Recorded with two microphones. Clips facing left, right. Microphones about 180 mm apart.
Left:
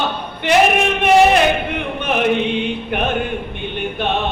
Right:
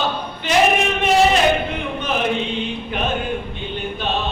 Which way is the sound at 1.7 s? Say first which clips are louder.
Left 2 dB; 60° left (ahead or behind).